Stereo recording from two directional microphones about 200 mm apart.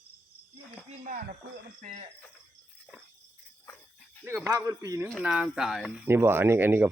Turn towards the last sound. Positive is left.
turn(degrees=-10)  # may be behind; listen again after turning